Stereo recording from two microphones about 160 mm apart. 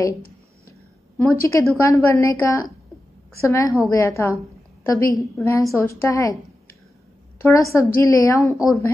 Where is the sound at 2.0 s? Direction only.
20° left (ahead or behind).